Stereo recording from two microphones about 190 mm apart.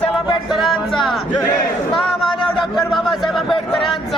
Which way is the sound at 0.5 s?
Centre (ahead or behind).